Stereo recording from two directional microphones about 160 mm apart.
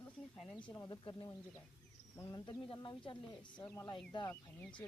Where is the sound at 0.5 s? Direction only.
30° left (ahead or behind).